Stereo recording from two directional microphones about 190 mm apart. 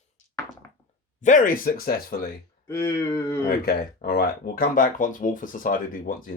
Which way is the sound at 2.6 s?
15° left (ahead or behind).